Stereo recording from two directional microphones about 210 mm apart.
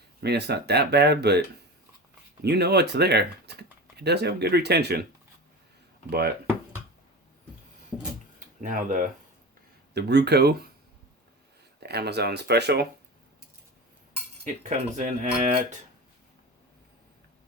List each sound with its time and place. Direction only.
0.2 s speech: 50° right (ahead or behind)
2.4 s speech: 50° right (ahead or behind)
6.1 s speech: 50° right (ahead or behind)
8.4 s a sound: 40° right (ahead or behind)
9.9 s speech: 50° right (ahead or behind)
11.8 s speech: 50° right (ahead or behind)
14.6 s speech: 35° right (ahead or behind)